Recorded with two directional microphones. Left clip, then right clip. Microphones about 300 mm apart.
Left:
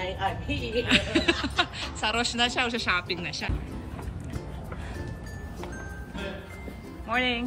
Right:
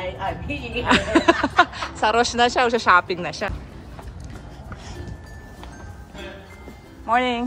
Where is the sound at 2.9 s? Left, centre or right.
Right.